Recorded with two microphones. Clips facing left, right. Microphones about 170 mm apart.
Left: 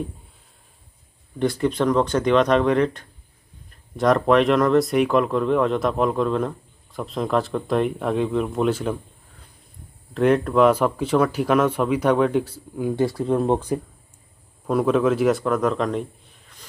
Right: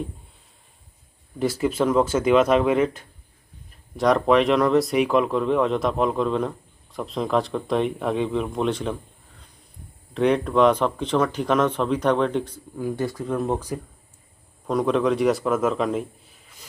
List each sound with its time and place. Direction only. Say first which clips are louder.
1.4 s speech: left 1 dB; 5° right (ahead or behind)
10.2 s speech: left 2 dB; centre (ahead or behind)
13.1 s speech: left 5 dB; 30° left (ahead or behind)
14.7 s a man's voice: left 2 dB; 5° left (ahead or behind)